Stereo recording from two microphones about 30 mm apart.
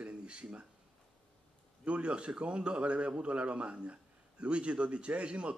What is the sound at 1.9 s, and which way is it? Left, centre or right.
A man's voice, right.